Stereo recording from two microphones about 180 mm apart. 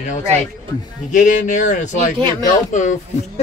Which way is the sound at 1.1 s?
45° left (ahead or behind).